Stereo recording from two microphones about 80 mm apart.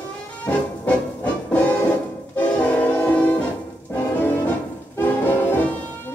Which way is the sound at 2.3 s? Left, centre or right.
Centre.